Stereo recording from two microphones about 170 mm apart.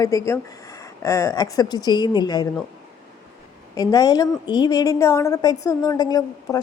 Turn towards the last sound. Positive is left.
turn(degrees=25)  # may be behind; listen again after turning